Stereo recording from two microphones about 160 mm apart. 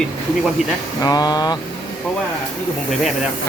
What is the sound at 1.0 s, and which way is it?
Vehicle, 25° left (ahead or behind).